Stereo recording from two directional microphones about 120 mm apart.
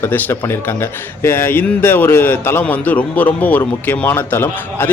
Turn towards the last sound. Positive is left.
turn(degrees=20)  # may be behind; listen again after turning